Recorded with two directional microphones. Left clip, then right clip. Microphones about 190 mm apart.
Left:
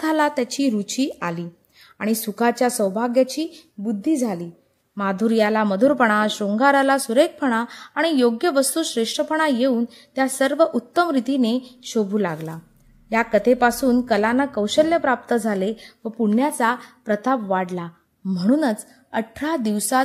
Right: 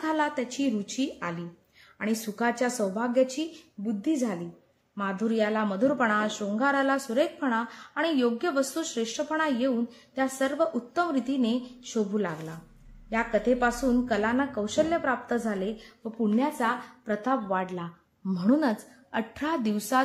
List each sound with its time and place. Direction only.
0.0 s a woman's voice: 40° left (ahead or behind)
18.2 s a woman's voice: 15° left (ahead or behind)